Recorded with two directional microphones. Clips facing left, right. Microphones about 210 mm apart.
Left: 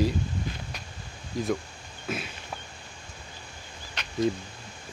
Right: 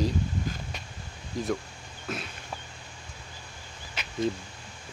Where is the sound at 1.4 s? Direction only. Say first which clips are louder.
Left 2 dB; centre (ahead or behind).